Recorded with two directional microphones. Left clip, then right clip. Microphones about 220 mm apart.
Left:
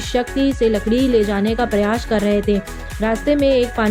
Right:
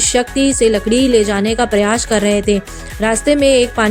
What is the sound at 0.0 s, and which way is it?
A woman's voice, 45° right (ahead or behind).